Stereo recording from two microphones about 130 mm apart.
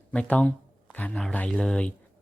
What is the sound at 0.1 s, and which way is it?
A man's voice, 5° left (ahead or behind).